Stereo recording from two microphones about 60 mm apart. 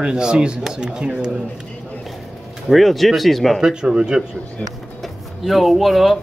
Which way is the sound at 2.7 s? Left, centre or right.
Centre.